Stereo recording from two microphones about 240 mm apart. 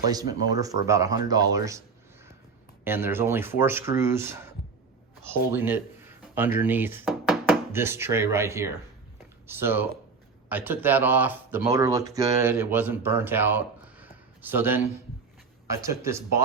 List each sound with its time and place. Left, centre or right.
0.0 s speech: centre
2.8 s speech: centre